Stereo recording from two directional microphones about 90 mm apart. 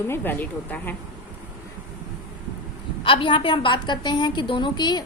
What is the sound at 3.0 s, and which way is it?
A woman's voice, 70° left (ahead or behind).